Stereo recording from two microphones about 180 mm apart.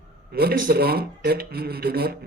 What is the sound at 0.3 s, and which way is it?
Speech, 60° right (ahead or behind).